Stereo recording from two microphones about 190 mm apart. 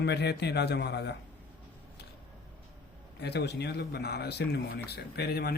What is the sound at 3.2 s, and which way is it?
Speech, 60° left (ahead or behind).